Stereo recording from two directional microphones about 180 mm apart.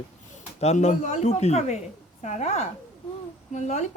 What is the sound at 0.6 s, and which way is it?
Speech, 40° left (ahead or behind).